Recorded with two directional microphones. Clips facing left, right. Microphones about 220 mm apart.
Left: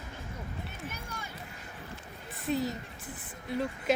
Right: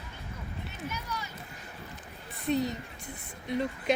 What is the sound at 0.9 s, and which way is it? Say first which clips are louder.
Run: right 4 dB; 50° left (ahead or behind).